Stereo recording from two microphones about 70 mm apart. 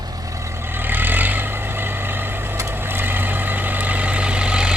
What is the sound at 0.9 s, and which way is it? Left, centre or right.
Vehicle, right.